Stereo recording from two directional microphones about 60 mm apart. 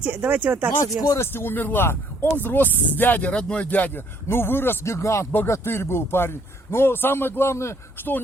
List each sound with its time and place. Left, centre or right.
0.0 s speech: right
1.2 s a man's voice: left
4.9 s a man's voice: left
7.9 s a man's voice: left